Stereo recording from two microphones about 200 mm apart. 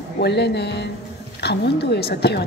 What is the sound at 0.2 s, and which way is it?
A woman's voice, 55° left (ahead or behind).